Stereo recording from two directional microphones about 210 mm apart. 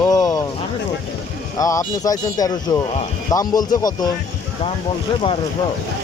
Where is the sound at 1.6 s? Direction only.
15° left (ahead or behind).